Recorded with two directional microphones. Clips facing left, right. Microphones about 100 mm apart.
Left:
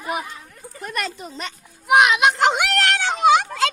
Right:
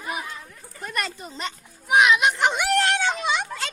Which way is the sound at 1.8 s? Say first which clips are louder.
Left 3 dB; 65° left (ahead or behind).